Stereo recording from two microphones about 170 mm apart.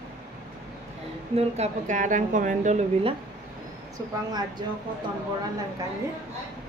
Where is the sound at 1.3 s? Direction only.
40° right (ahead or behind).